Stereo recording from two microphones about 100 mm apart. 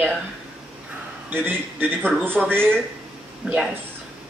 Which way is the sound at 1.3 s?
20° right (ahead or behind).